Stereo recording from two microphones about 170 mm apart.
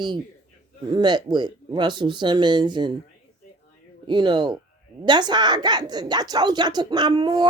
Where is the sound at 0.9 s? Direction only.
25° right (ahead or behind).